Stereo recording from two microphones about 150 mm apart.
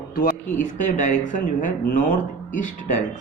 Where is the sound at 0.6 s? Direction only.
55° left (ahead or behind).